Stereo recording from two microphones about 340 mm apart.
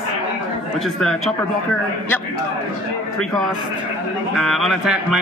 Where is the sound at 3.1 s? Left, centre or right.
Centre.